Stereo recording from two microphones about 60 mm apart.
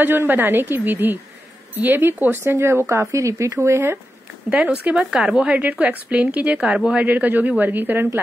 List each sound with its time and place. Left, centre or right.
0.0 s a woman's voice: right
4.5 s a woman's voice: right